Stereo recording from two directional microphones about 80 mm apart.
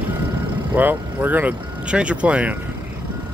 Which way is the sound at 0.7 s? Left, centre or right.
Right.